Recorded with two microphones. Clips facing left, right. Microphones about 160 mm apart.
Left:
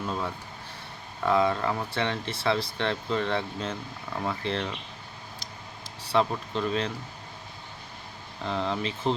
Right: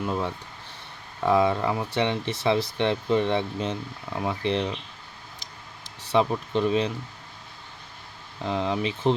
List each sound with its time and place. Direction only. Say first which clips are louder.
0.0 s speech: right 4 dB; 15° right (ahead or behind)
6.0 s speech: right 3 dB; 20° right (ahead or behind)
8.4 s speech: right 3 dB; 15° right (ahead or behind)